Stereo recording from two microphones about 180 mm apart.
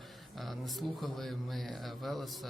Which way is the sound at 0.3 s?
Centre (ahead or behind).